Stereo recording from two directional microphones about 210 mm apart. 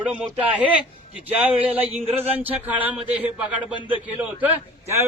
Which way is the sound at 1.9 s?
30° right (ahead or behind).